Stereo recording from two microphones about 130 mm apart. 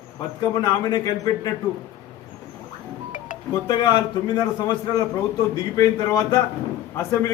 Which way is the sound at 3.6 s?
35° left (ahead or behind).